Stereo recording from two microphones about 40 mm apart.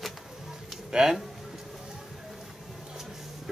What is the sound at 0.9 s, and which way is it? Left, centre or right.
Speech, centre.